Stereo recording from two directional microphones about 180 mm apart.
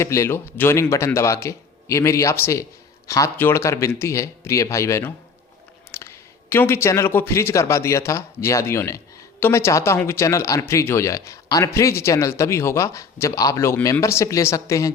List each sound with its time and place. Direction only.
0.0 s a man's voice: 15° left (ahead or behind)